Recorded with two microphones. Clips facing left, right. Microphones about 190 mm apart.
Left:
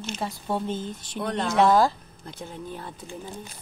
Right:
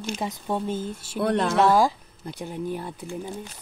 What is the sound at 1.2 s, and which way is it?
Speech, 60° right (ahead or behind).